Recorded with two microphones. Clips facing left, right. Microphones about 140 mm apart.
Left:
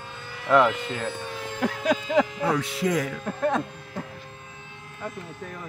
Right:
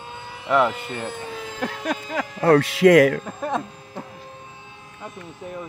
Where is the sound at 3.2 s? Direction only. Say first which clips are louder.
Left 2 dB; 10° right (ahead or behind).